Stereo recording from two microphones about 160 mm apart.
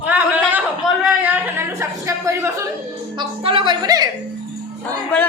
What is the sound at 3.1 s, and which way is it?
Speech, 35° right (ahead or behind).